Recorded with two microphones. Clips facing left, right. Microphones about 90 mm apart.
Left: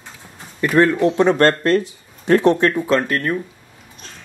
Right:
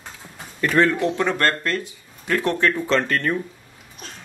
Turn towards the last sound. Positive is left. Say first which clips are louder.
# left 2 dB
turn(degrees=5)  # may be behind; listen again after turning